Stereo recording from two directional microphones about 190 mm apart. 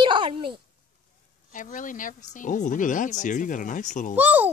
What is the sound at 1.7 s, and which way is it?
Speech, 45° left (ahead or behind).